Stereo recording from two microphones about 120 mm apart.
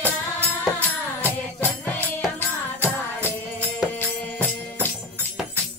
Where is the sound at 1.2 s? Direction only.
15° left (ahead or behind).